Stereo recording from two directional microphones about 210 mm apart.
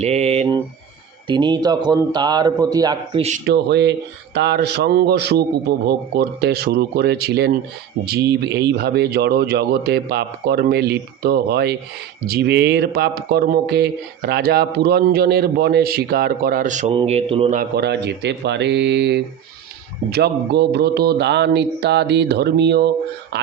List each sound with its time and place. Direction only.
0.0 s speech: 30° right (ahead or behind)
3.4 s speech: 55° right (ahead or behind); by 17.6 s 25° right (ahead or behind)
17.6 s speech: 50° right (ahead or behind)